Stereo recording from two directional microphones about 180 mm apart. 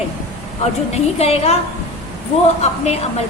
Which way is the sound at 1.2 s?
35° left (ahead or behind).